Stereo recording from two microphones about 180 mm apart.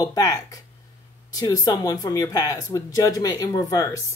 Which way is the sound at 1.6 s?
20° left (ahead or behind).